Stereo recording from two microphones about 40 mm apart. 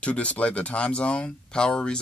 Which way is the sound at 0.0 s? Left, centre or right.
Left.